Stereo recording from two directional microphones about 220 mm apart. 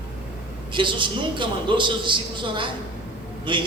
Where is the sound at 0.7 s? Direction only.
20° right (ahead or behind).